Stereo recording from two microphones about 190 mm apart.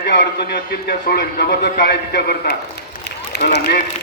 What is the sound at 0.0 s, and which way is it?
A man's voice, 60° left (ahead or behind).